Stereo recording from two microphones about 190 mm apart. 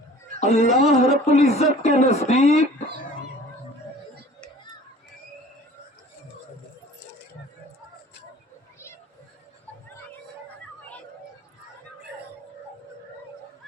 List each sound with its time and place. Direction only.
0.3 s speech: 35° left (ahead or behind)